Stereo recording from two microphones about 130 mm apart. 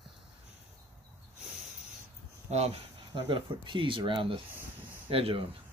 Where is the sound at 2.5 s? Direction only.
55° right (ahead or behind).